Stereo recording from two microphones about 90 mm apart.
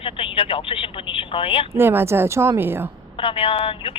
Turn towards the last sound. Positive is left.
turn(degrees=80)